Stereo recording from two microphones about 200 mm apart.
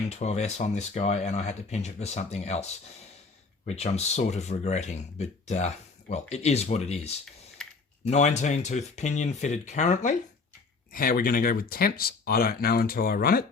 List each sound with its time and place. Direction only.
0.1 s speech: 35° left (ahead or behind)